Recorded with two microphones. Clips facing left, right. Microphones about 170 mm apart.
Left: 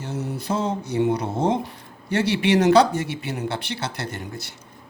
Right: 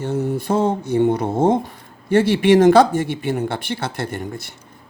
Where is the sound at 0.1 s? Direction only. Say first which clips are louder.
Right 6 dB; 55° right (ahead or behind).